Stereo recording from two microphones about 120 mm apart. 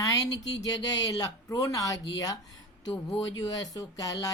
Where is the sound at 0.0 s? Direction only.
30° left (ahead or behind).